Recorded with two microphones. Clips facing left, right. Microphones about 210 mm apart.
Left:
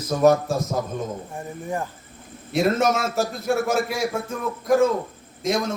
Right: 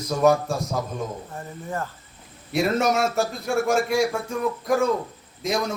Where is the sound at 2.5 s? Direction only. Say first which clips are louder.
Left 1 dB; centre (ahead or behind).